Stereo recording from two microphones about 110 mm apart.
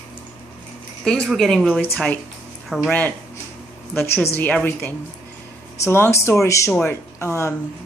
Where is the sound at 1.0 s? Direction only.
5° left (ahead or behind).